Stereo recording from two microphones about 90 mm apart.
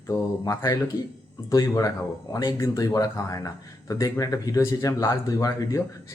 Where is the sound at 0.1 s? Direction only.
40° left (ahead or behind).